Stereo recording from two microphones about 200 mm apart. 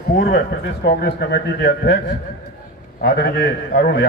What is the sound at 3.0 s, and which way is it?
A man's voice, 50° left (ahead or behind).